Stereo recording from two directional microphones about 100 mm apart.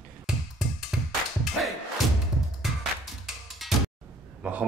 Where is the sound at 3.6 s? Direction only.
Centre (ahead or behind).